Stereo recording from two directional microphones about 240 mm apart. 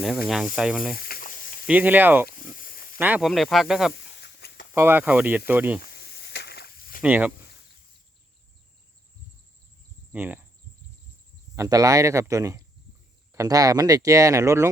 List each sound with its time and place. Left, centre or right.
0.3 s speech: centre
0.9 s snake: left
1.6 s speech: centre
2.2 s a sound: left
3.0 s speech: centre
3.9 s a sound: left
4.7 s speech: centre
6.1 s snake: left
7.0 s speech: centre
10.1 s speech: centre
11.5 s speech: centre